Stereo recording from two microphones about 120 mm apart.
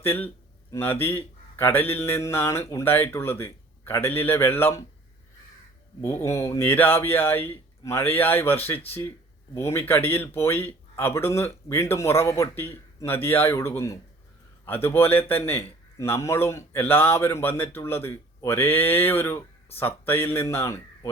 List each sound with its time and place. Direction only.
0.0 s a man's voice: 20° left (ahead or behind)
6.0 s a man's voice: 20° left (ahead or behind)